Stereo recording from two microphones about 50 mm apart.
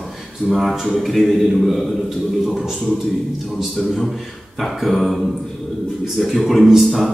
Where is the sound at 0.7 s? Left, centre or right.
Centre.